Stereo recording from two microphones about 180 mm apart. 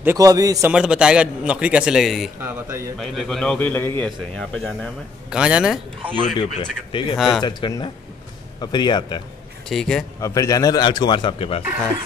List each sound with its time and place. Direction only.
0.0 s a man's voice: 15° right (ahead or behind)
0.7 s a man's voice: 5° right (ahead or behind)
2.4 s a man's voice: 15° right (ahead or behind)
3.0 s speech: 5° left (ahead or behind)
5.3 s a man's voice: 5° right (ahead or behind)
6.6 s a man's voice: 30° left (ahead or behind)
7.2 s a man's voice: centre (ahead or behind)
7.4 s a man's voice: 25° left (ahead or behind)
9.7 s a man's voice: centre (ahead or behind)
10.2 s a man's voice: 20° left (ahead or behind)